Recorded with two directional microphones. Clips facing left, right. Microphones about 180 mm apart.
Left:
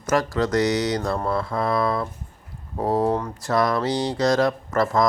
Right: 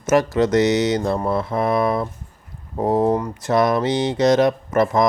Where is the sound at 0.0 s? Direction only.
25° right (ahead or behind).